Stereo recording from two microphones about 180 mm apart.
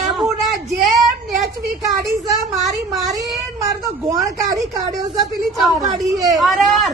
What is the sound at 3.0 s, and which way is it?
A woman's voice, 20° right (ahead or behind).